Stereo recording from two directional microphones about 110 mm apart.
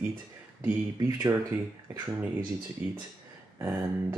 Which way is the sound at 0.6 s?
30° right (ahead or behind).